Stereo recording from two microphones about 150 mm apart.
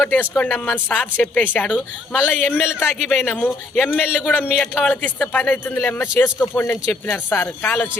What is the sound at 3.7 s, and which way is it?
Speech, centre (ahead or behind).